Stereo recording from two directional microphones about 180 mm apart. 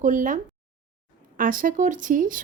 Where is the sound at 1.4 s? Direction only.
50° right (ahead or behind).